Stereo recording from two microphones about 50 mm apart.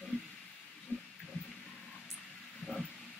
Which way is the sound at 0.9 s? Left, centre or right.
Left.